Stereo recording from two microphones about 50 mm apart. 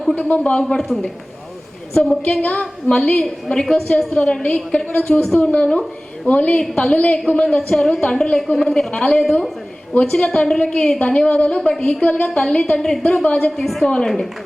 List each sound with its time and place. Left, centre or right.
0.3 s a woman's voice: left
0.5 s a woman's voice: centre
2.4 s a woman's voice: left
5.5 s a woman's voice: left
6.6 s a woman's voice: centre
13.6 s a woman's voice: centre